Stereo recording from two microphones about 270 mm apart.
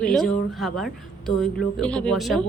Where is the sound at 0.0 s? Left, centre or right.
Centre.